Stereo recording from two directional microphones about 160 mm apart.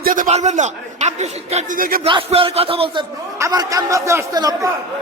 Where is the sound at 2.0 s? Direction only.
35° right (ahead or behind).